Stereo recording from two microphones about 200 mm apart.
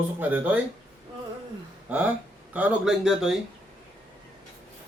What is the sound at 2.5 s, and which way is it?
Speech, 5° right (ahead or behind).